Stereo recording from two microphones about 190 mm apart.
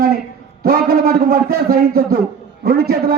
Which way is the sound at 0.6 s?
50° right (ahead or behind).